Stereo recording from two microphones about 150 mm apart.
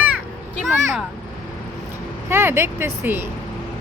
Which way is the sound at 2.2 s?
15° right (ahead or behind).